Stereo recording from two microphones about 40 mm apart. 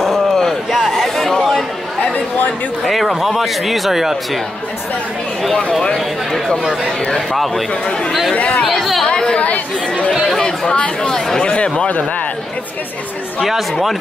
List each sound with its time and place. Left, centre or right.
0.0 s a sound: centre
2.8 s speech: centre
8.6 s speech: centre
9.0 s chatter: left
10.4 s speech: centre
11.4 s speech: left
13.4 s speech: centre